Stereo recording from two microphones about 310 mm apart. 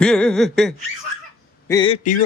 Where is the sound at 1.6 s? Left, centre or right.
Centre.